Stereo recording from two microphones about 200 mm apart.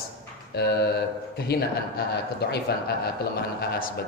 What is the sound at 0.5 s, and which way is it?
Speech, 55° left (ahead or behind).